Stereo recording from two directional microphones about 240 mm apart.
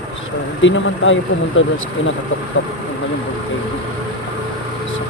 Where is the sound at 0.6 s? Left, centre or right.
Left.